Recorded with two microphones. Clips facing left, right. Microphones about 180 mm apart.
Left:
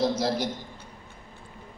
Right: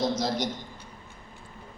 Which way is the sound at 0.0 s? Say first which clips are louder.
Left 2 dB; 10° left (ahead or behind).